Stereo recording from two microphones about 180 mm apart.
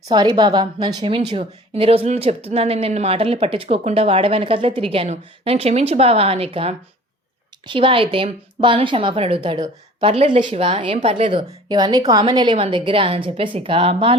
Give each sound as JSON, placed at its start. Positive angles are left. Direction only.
{"t": 0.1, "sound": "a woman's voice", "side_deg": -25}
{"t": 10.9, "sound": "a woman's voice", "side_deg": -40}